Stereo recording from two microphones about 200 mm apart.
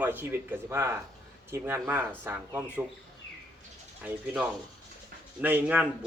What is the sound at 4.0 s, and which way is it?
A man's voice, 10° right (ahead or behind).